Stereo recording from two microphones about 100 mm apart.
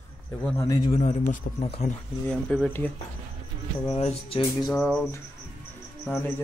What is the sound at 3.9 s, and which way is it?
Music, 90° left.